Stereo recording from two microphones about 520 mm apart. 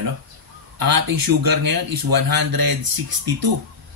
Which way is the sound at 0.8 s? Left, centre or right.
Right.